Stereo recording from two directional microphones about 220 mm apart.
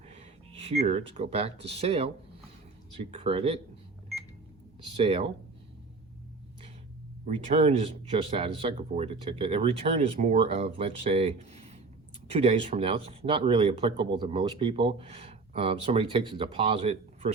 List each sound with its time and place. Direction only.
0.6 s speech: 30° right (ahead or behind)
4.9 s speech: 25° right (ahead or behind)
7.3 s speech: 30° right (ahead or behind)